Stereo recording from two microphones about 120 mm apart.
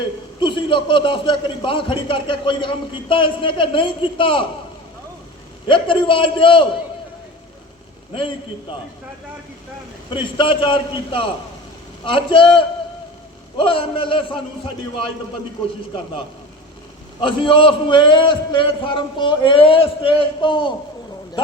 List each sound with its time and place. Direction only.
0.3 s a man's voice: 45° left (ahead or behind)
5.6 s a man's voice: 45° left (ahead or behind)
10.2 s a man's voice: 45° left (ahead or behind)
13.6 s a man's voice: 45° left (ahead or behind)
17.2 s a man's voice: 45° left (ahead or behind)